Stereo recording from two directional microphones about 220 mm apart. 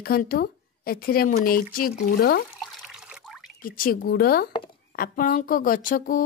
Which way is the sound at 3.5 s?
40° left (ahead or behind).